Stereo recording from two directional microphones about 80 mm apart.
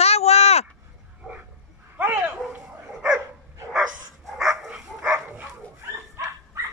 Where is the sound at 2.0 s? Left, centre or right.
Centre.